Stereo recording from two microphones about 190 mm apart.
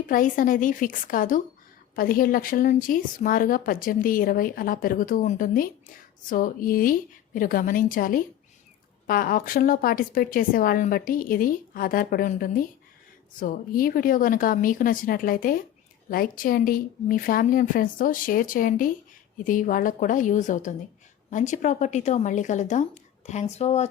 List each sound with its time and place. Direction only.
0.1 s speech: 45° left (ahead or behind)